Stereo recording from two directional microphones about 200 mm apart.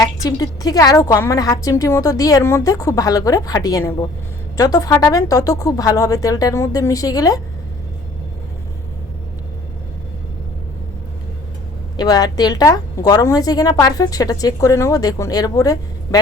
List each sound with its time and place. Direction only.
0.0 s a woman's voice: 15° left (ahead or behind)
11.9 s a woman's voice: 20° left (ahead or behind)